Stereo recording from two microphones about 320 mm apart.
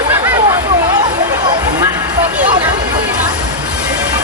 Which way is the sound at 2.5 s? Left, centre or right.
Centre.